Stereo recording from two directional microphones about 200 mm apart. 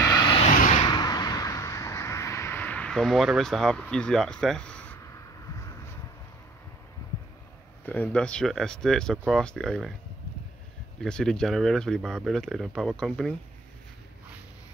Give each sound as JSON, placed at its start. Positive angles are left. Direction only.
{"t": 0.0, "sound": "vehicle", "side_deg": 20}
{"t": 0.7, "sound": "a sound", "side_deg": 20}
{"t": 7.8, "sound": "speech", "side_deg": 5}
{"t": 11.0, "sound": "speech", "side_deg": 5}